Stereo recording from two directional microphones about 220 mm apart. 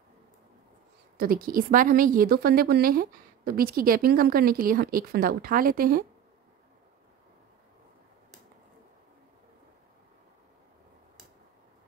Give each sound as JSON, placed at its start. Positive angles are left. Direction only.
{"t": 1.1, "sound": "a woman's voice", "side_deg": -40}